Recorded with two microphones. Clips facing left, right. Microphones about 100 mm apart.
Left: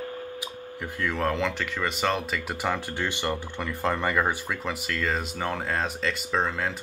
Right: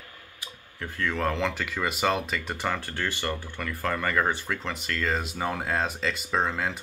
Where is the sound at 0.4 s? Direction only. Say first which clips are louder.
Left 4 dB; 15° left (ahead or behind).